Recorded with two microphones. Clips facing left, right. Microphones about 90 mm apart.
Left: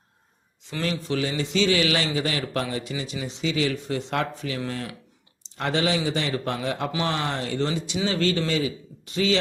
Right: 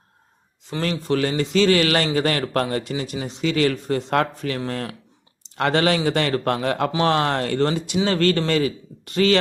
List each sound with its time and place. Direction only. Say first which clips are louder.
0.7 s speech: right 4 dB; 45° right (ahead or behind)
5.5 s a man's voice: right 5 dB; 65° right (ahead or behind)